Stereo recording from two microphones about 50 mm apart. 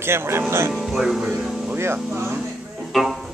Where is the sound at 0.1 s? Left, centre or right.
Right.